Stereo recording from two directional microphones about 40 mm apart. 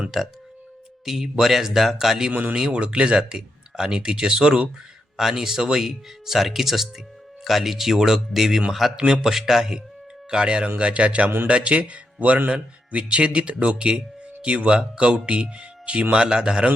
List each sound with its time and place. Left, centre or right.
0.1 s speech: centre
2.3 s a man's voice: right
5.1 s speech: centre
10.2 s a man's voice: right